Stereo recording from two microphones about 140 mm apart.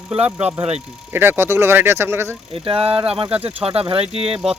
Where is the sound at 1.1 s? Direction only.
15° right (ahead or behind).